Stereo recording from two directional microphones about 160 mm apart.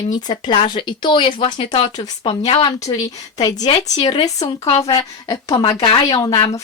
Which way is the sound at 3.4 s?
25° left (ahead or behind).